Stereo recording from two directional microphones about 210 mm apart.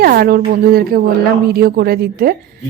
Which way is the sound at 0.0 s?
45° right (ahead or behind).